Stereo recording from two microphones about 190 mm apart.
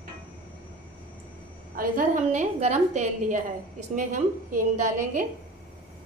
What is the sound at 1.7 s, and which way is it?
A woman's voice, 45° right (ahead or behind).